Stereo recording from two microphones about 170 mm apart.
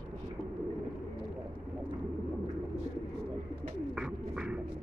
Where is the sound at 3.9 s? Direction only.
5° right (ahead or behind).